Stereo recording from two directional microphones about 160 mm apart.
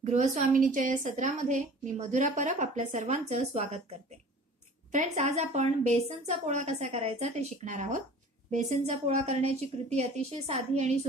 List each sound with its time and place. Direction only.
0.1 s a woman's voice: 50° right (ahead or behind)
4.9 s a woman's voice: 50° right (ahead or behind)